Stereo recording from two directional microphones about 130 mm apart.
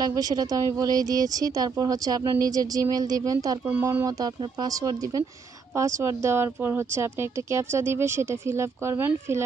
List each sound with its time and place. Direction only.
0.0 s speech: 30° right (ahead or behind)